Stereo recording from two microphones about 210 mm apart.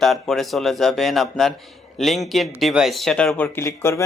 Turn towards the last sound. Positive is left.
turn(degrees=15)  # may be behind; listen again after turning